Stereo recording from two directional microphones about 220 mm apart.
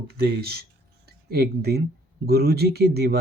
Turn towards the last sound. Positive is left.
turn(degrees=-45)  # may be behind; listen again after turning